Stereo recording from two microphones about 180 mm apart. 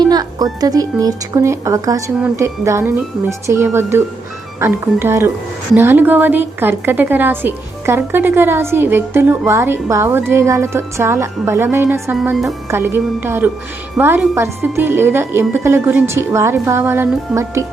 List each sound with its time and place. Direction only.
0.0 s music: 20° right (ahead or behind)
0.6 s a woman's voice: 20° right (ahead or behind)
12.2 s a woman's voice: 5° right (ahead or behind)